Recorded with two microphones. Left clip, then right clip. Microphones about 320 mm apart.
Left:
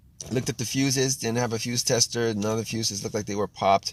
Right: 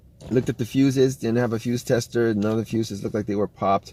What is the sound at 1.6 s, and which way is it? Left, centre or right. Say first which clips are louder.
Speech: even; centre.